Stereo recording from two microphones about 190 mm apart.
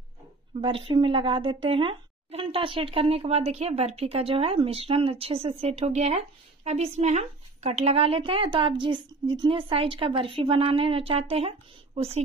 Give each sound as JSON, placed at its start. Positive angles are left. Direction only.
{"t": 0.6, "sound": "speech", "side_deg": -25}